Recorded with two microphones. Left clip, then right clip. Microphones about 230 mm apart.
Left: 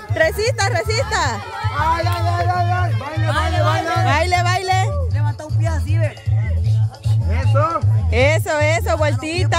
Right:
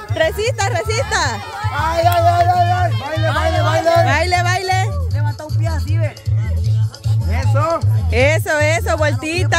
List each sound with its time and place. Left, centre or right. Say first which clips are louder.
0.1 s speech: even; centre
1.8 s speech: right 5 dB; right
3.3 s speech: right 2 dB; centre
7.3 s speech: right 1 dB; right
8.1 s speech: right 2 dB; centre